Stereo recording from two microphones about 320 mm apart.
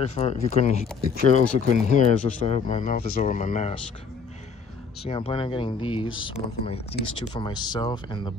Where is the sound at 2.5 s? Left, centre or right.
Left.